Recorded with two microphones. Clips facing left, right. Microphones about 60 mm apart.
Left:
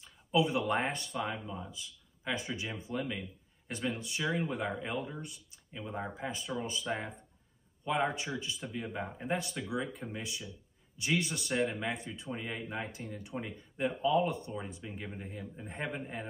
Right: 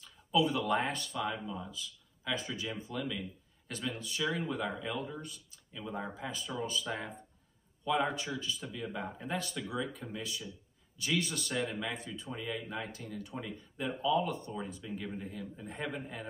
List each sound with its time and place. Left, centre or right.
0.0 s speech: left